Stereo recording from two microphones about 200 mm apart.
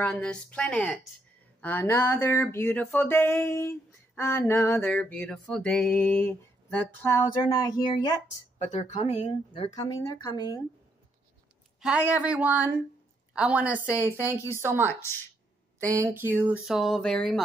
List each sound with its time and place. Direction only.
0.0 s a woman's voice: 5° left (ahead or behind)
1.6 s a sound: 10° left (ahead or behind)
7.4 s speech: 20° left (ahead or behind)
8.5 s speech: 35° left (ahead or behind)
11.8 s a woman's voice: 5° right (ahead or behind)
14.9 s a sound: 10° left (ahead or behind)
15.8 s speech: 15° right (ahead or behind); by 17.4 s centre (ahead or behind)